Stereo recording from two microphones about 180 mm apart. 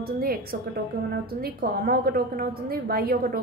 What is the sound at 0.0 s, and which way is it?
A woman's voice, 55° right (ahead or behind).